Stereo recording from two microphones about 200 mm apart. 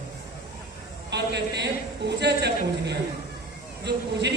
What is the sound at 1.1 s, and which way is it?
A man's voice, 60° right (ahead or behind).